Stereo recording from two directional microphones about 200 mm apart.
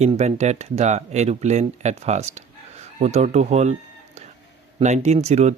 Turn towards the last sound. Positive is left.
turn(degrees=-35)  # may be behind; listen again after turning